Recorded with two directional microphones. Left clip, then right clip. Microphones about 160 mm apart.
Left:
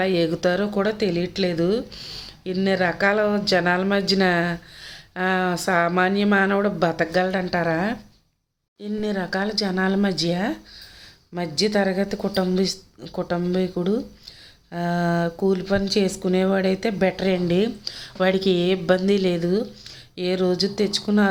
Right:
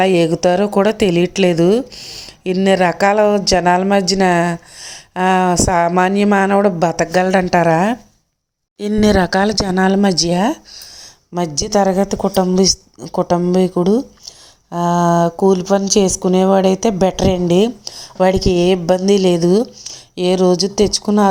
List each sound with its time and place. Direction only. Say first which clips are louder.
0.0 s speech: right 8 dB; 40° right (ahead or behind)
2.0 s speech: right 4 dB; 30° right (ahead or behind); by 7.9 s 45° right (ahead or behind)
8.8 s speech: right 13 dB; 70° right (ahead or behind); by 21.2 s 40° right (ahead or behind)